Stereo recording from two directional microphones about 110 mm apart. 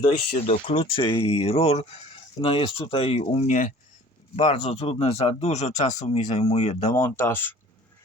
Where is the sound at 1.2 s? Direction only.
65° left (ahead or behind).